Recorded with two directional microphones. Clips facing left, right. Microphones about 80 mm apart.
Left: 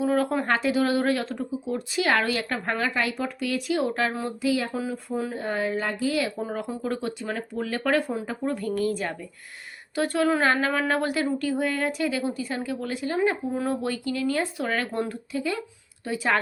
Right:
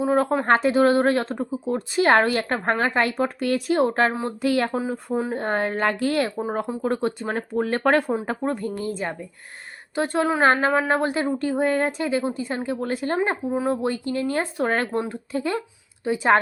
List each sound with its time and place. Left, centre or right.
0.0 s speech: right
4.4 s speech: right
4.7 s speech: right
5.4 s a woman's voice: right
6.5 s a woman's voice: right
8.5 s speech: right
13.1 s speech: right
16.0 s speech: right